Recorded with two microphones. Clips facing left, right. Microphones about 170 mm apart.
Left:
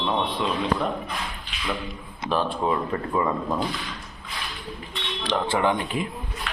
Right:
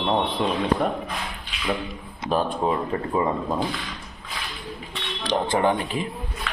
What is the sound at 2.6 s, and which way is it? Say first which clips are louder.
Speech: right 1 dB; 25° right (ahead or behind).